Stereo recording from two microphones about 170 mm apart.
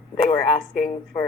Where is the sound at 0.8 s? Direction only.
15° left (ahead or behind).